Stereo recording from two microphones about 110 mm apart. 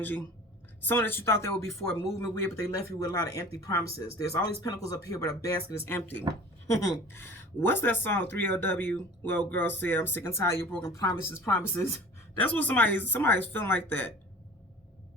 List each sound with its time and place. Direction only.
0.9 s speech: 20° left (ahead or behind)